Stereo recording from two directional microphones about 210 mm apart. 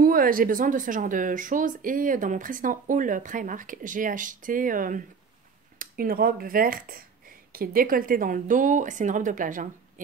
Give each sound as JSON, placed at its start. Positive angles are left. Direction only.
{"t": 0.0, "sound": "speech", "side_deg": -40}